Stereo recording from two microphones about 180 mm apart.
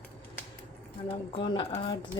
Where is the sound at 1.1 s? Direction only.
30° left (ahead or behind).